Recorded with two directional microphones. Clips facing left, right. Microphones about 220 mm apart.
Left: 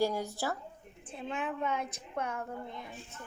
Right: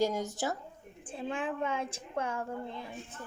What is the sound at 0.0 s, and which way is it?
Speech, 20° right (ahead or behind).